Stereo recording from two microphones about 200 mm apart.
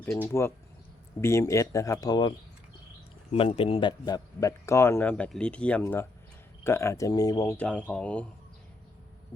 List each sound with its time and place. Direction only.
0.0 s a man's voice: 10° left (ahead or behind)
3.3 s a man's voice: 25° left (ahead or behind); by 8.3 s 5° left (ahead or behind)